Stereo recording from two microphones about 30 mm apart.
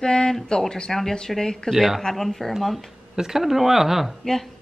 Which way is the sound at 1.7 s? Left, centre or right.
Centre.